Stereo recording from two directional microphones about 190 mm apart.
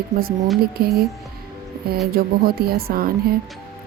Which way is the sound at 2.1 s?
55° right (ahead or behind).